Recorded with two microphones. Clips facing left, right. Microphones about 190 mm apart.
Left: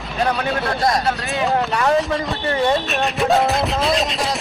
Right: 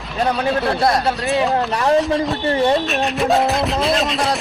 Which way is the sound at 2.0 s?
Centre (ahead or behind).